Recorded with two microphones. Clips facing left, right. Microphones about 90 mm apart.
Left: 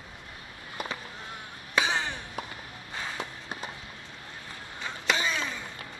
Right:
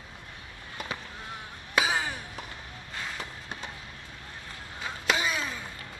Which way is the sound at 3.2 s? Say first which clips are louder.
Left 2 dB; 5° left (ahead or behind).